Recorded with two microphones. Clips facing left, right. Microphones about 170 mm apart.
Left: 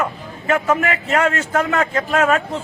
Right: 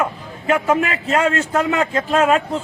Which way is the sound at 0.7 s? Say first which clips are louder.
Right 1 dB; 30° right (ahead or behind).